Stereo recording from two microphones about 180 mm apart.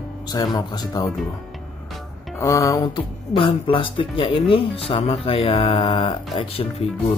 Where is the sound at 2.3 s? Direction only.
15° left (ahead or behind); by 6.9 s 35° left (ahead or behind).